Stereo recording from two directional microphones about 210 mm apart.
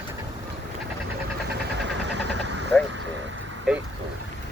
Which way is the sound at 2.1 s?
55° right (ahead or behind).